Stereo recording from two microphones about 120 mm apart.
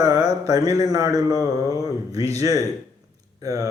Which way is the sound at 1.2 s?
25° left (ahead or behind).